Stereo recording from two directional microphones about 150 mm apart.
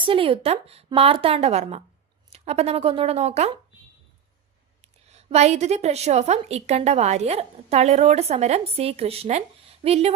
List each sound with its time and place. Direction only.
0.0 s a woman's voice: 35° right (ahead or behind)
4.8 s a woman's voice: 45° right (ahead or behind)